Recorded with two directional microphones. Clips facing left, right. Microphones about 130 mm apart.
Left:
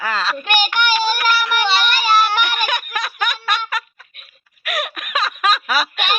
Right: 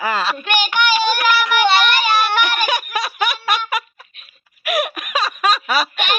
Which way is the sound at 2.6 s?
5° right (ahead or behind).